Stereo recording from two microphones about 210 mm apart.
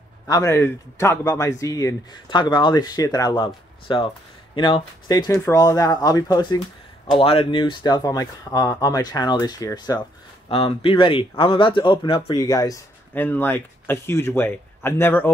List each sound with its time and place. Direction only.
0.3 s speech: 15° left (ahead or behind)